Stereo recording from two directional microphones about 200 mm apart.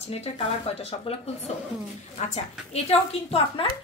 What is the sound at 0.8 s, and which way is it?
A woman's voice, 30° left (ahead or behind).